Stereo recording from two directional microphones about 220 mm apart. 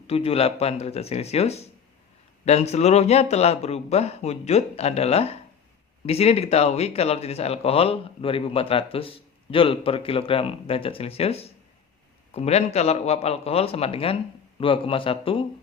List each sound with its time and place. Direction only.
0.1 s speech: 25° left (ahead or behind)